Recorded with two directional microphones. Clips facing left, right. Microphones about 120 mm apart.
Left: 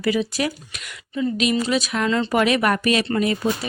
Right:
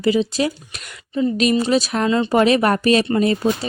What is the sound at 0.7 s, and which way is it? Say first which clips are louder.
A woman's voice: right 4 dB; 40° right (ahead or behind).